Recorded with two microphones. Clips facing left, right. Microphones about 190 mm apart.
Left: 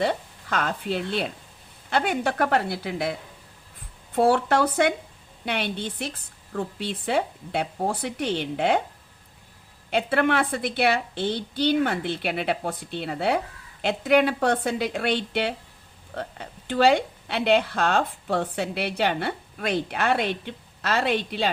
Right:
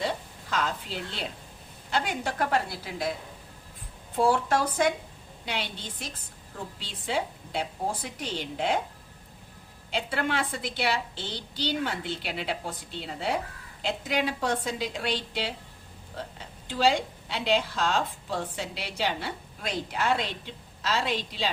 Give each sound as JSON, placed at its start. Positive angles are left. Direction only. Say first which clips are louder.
{"t": 0.0, "sound": "a woman's voice", "louder": "left 6 dB", "side_deg": 55}
{"t": 9.9, "sound": "a woman's voice", "louder": "left 7 dB", "side_deg": 60}